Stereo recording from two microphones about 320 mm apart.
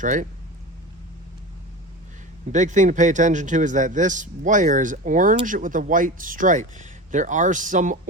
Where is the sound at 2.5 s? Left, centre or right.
Right.